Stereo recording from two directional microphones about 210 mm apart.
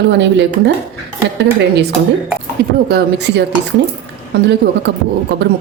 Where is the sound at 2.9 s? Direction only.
55° right (ahead or behind).